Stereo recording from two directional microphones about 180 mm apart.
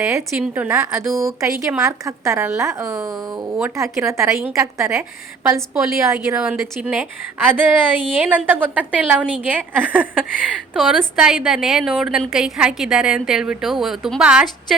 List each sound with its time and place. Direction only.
0.0 s a woman's voice: 15° right (ahead or behind)